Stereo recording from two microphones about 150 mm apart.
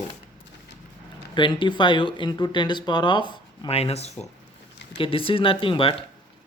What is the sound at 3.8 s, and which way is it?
Speech, 45° left (ahead or behind).